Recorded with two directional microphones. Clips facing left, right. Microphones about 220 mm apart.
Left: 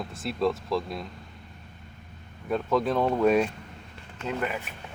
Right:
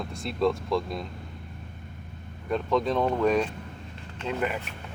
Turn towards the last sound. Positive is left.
turn(degrees=0)  # may be behind; listen again after turning